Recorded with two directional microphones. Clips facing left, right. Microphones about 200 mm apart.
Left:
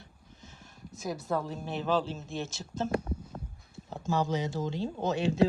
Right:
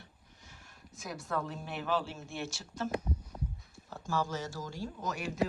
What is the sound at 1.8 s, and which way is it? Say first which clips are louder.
Speech: left 4 dB; 20° left (ahead or behind).